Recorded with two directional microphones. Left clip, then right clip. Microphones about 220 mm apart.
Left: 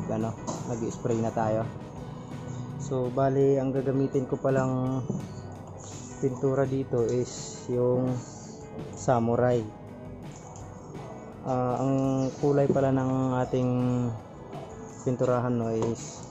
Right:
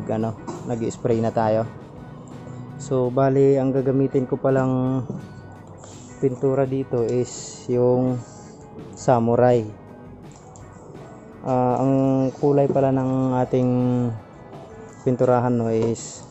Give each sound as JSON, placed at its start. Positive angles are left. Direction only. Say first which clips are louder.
{"t": 0.8, "sound": "speech", "louder": "right 8 dB", "side_deg": -40}
{"t": 2.8, "sound": "speech", "louder": "right 7 dB", "side_deg": -40}
{"t": 6.2, "sound": "speech", "louder": "right 6 dB", "side_deg": -30}
{"t": 9.0, "sound": "speech", "louder": "right 7 dB", "side_deg": -35}
{"t": 11.4, "sound": "speech", "louder": "right 8 dB", "side_deg": -40}
{"t": 15.0, "sound": "speech", "louder": "right 8 dB", "side_deg": -40}